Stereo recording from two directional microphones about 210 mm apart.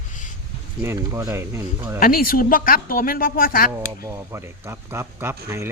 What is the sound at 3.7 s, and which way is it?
Speech, 15° right (ahead or behind).